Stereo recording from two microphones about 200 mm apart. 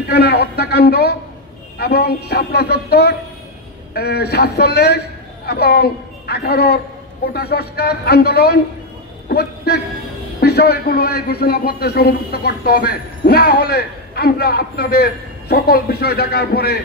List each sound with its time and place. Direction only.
0.1 s a man's voice: 55° left (ahead or behind)